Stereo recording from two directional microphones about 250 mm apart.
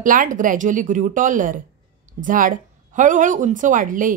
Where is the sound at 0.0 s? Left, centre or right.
Right.